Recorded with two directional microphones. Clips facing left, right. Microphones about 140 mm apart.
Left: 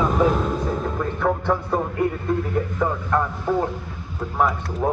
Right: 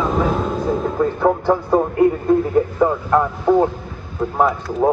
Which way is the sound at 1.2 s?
30° right (ahead or behind).